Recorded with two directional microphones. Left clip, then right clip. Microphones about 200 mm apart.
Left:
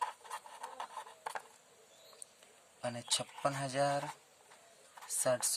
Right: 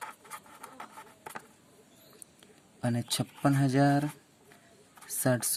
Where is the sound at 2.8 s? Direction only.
20° right (ahead or behind).